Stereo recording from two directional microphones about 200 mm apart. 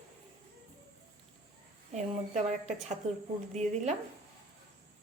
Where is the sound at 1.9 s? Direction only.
35° right (ahead or behind).